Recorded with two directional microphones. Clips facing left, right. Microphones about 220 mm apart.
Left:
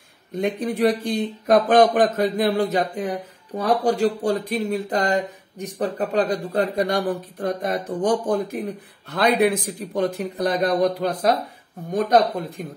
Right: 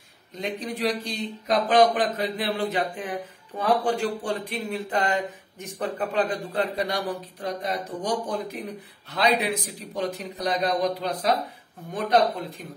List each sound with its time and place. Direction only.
0.4 s speech: 55° left (ahead or behind)